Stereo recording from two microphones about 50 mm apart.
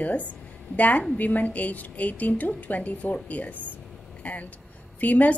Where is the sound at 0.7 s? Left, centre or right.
Left.